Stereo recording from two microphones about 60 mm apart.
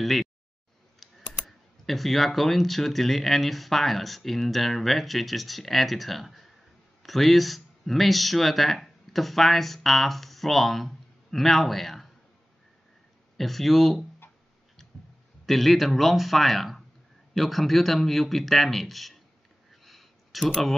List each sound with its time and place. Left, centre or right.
0.0 s a man's voice: centre
13.4 s a man's voice: centre
15.4 s a man's voice: centre
19.7 s a sound: centre